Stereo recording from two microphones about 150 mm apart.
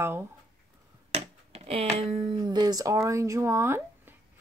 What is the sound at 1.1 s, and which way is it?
Finger snapping, 40° right (ahead or behind).